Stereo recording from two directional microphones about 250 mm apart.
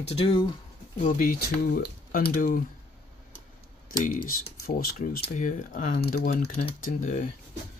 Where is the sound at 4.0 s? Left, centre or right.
Left.